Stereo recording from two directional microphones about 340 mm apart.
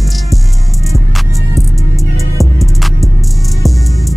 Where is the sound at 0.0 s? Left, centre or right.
Centre.